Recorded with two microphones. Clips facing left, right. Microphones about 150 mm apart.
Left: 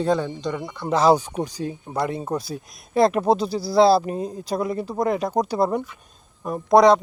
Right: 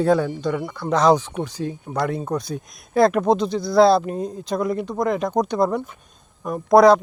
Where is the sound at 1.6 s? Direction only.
30° right (ahead or behind).